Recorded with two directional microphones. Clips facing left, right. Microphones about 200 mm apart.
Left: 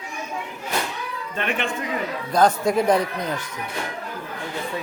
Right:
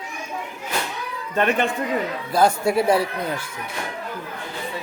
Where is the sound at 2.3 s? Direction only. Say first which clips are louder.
Even; 10° right (ahead or behind).